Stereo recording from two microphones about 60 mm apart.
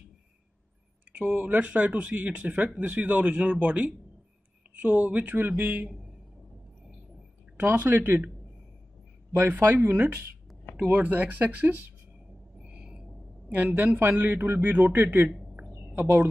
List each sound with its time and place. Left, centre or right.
1.1 s speech: right
7.6 s a man's voice: right
9.3 s speech: right
9.7 s a man's voice: right
10.8 s speech: right
12.6 s owl: centre
13.5 s a man's voice: right
15.2 s speech: centre
15.8 s a sound: right